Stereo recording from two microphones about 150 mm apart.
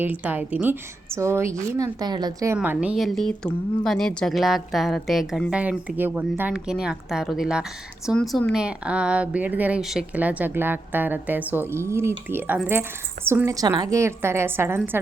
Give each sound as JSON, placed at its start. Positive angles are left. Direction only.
{"t": 0.0, "sound": "a woman's voice", "side_deg": -10}
{"t": 2.6, "sound": "a woman's voice", "side_deg": -5}